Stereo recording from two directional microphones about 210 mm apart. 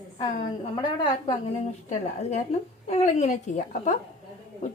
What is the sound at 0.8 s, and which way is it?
Speech, 25° left (ahead or behind).